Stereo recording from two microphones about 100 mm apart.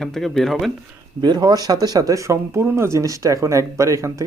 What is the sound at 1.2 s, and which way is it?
Speech, 45° right (ahead or behind).